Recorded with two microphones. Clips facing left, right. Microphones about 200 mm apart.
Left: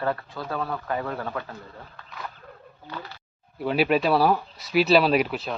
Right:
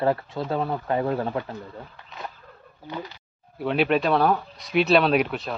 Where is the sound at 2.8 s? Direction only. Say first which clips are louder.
Right 4 dB; 15° right (ahead or behind).